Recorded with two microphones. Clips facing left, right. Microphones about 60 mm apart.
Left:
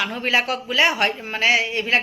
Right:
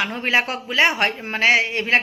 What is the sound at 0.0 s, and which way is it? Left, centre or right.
Speech, right.